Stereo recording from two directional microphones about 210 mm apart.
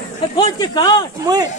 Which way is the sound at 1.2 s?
15° right (ahead or behind).